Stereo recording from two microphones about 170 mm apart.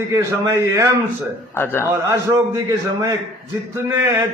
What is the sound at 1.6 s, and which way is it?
Speech, 10° left (ahead or behind).